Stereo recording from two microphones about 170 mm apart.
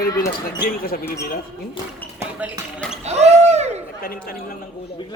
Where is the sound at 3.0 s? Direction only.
40° right (ahead or behind).